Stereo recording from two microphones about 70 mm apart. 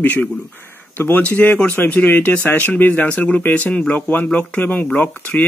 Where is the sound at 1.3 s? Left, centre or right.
Left.